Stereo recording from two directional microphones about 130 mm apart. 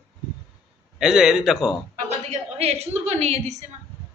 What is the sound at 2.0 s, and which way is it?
A woman's voice, 60° right (ahead or behind).